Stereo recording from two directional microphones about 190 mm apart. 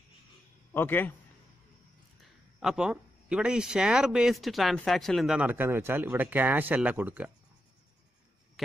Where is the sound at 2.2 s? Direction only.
Centre (ahead or behind).